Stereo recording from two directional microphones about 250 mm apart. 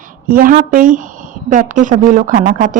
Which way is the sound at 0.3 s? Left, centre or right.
Right.